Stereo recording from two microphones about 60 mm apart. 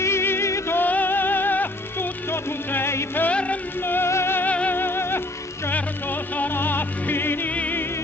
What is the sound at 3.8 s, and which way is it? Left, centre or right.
Music, left.